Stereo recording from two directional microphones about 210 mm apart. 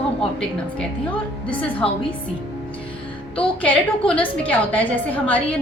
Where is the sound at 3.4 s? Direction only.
5° left (ahead or behind).